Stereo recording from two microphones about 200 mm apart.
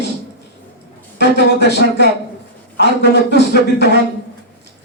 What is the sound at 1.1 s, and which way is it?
A man's voice, 60° left (ahead or behind).